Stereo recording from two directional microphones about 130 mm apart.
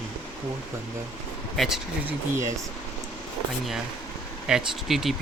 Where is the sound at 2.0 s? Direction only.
20° right (ahead or behind).